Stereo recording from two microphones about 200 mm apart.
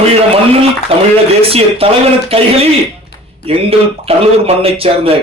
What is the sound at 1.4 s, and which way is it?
Speech, 30° right (ahead or behind).